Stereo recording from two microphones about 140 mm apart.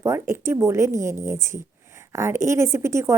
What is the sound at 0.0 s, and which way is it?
Speech, 20° right (ahead or behind).